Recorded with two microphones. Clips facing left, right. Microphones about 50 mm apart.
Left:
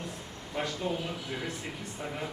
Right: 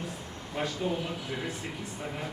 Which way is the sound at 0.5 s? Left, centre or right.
Centre.